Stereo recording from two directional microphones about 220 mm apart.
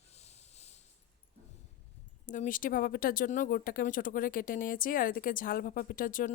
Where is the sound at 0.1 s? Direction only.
30° left (ahead or behind).